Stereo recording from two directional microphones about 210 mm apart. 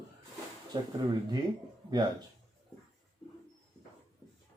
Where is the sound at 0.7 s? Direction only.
20° right (ahead or behind).